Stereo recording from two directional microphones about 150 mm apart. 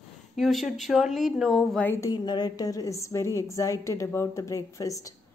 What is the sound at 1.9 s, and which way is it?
A woman's voice, 25° left (ahead or behind).